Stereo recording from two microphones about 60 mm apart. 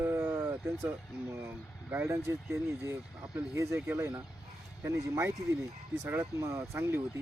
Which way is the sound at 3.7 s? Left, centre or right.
Right.